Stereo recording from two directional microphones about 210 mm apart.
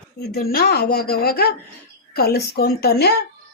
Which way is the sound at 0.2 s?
45° left (ahead or behind).